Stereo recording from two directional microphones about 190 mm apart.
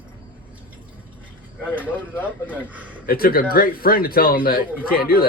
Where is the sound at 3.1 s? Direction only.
50° left (ahead or behind).